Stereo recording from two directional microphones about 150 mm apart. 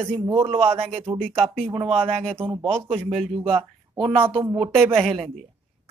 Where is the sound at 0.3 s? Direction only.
40° right (ahead or behind).